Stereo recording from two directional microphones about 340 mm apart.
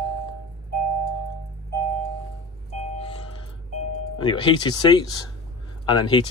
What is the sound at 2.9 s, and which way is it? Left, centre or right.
Music, centre.